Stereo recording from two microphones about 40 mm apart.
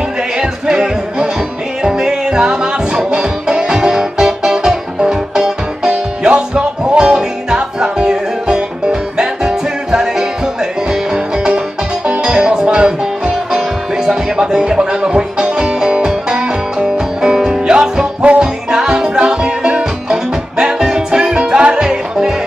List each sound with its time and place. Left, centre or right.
0.4 s music: centre
12.1 s music: right